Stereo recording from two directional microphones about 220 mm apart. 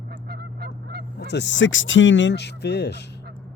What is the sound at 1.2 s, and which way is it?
Speech, 50° left (ahead or behind).